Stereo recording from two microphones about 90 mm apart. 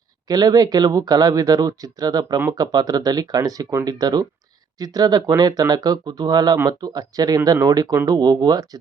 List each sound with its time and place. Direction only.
0.3 s speech: 45° right (ahead or behind)